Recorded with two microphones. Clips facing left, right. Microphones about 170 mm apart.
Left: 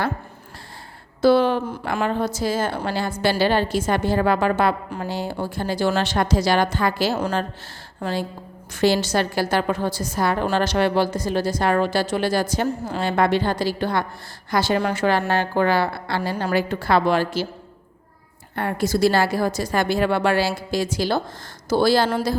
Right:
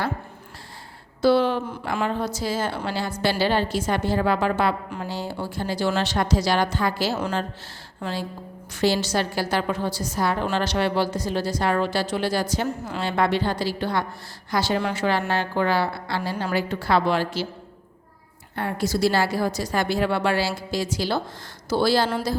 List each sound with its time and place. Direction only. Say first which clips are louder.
1.2 s a woman's voice: left 3 dB; 50° left (ahead or behind)
8.0 s speech: left 4 dB; 40° left (ahead or behind)
8.7 s a woman's voice: left 3 dB; 55° left (ahead or behind)
18.5 s a woman's voice: left 3 dB; 55° left (ahead or behind)